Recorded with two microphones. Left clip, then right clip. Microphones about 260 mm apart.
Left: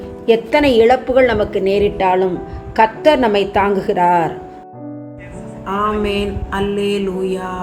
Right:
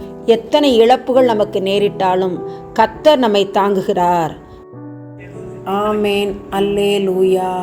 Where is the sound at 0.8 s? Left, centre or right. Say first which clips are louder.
Right 1 dB; centre.